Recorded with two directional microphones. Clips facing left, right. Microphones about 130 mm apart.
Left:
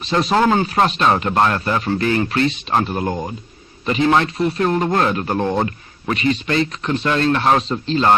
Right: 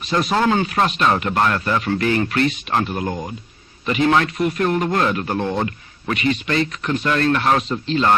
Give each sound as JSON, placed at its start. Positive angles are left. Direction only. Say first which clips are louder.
{"t": 0.0, "sound": "a man's voice", "louder": "left 2 dB", "side_deg": 30}